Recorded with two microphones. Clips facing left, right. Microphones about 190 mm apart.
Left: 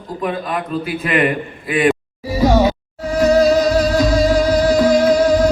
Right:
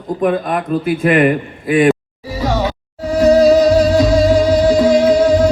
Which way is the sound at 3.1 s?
35° right (ahead or behind).